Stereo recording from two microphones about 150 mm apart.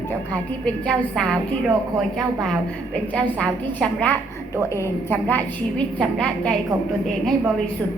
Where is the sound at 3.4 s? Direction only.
10° left (ahead or behind).